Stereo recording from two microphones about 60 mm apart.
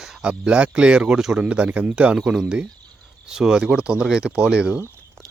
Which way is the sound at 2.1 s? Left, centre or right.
Centre.